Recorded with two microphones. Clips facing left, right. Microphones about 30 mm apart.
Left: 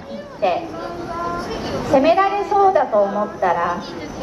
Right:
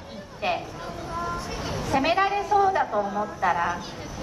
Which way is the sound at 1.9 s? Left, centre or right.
Centre.